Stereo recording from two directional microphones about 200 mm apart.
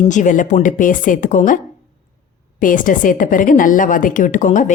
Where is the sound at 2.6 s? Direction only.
40° left (ahead or behind).